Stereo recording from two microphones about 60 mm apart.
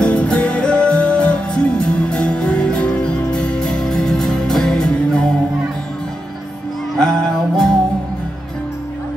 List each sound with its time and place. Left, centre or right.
0.0 s music: centre
7.0 s music: centre